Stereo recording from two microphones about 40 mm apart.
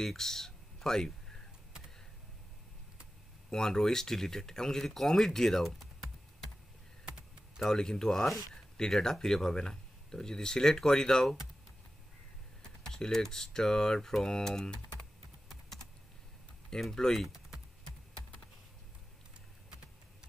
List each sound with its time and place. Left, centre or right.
0.0 s speech: centre
3.4 s speech: centre
7.7 s speech: centre
12.8 s speech: centre
15.4 s computer keyboard: centre
16.9 s speech: centre